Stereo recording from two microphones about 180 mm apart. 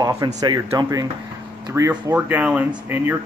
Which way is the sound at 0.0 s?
20° right (ahead or behind).